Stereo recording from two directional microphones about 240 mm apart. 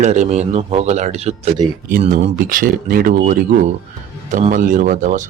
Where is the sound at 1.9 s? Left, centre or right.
Right.